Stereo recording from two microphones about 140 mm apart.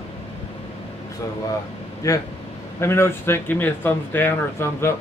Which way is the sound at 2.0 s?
25° left (ahead or behind).